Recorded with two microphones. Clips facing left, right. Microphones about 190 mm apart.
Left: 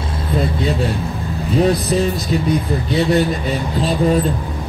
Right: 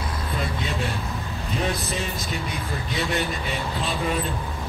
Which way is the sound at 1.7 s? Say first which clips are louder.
Left 11 dB; 40° left (ahead or behind).